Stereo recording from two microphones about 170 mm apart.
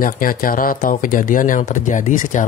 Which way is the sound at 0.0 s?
55° left (ahead or behind).